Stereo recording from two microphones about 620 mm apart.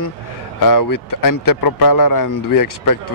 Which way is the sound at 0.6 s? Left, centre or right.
Left.